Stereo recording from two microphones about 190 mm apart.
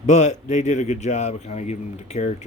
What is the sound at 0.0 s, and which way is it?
Speech, 35° left (ahead or behind).